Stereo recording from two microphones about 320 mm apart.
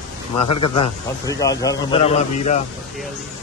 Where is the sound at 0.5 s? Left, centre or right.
Centre.